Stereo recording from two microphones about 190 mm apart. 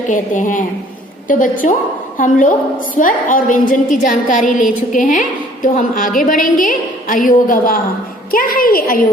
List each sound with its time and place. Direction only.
0.1 s a woman's voice: 40° left (ahead or behind)